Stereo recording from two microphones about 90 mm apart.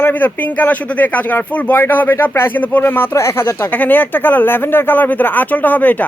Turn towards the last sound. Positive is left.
turn(degrees=20)  # may be behind; listen again after turning